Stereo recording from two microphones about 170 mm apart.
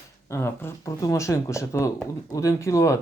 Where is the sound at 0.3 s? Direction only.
15° left (ahead or behind).